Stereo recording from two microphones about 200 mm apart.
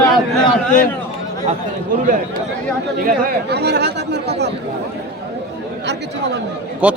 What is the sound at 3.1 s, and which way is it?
Speech, 50° right (ahead or behind).